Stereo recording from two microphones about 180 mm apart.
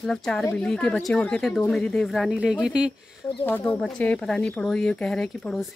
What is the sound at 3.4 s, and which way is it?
Speech, 10° left (ahead or behind).